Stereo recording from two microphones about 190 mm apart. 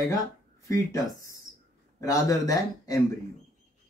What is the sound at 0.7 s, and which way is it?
Speech, 15° left (ahead or behind).